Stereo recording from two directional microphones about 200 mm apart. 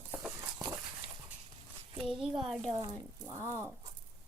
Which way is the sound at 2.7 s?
20° right (ahead or behind).